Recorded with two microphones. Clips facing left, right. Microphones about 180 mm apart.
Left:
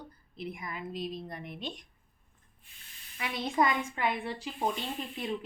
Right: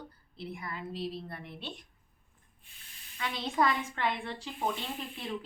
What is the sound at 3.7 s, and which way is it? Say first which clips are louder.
A woman's voice: left 1 dB; 5° left (ahead or behind).